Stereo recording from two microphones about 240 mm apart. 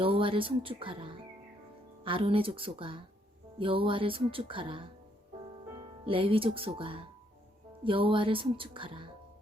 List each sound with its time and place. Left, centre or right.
0.0 s speech: right